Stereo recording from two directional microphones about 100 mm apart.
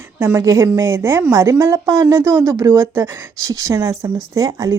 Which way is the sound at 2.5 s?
45° right (ahead or behind).